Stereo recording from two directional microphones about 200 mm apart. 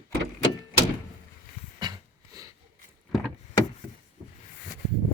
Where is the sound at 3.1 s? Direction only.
Centre (ahead or behind).